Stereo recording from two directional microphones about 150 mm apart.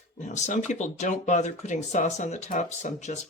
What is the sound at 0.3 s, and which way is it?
Speech, 50° left (ahead or behind).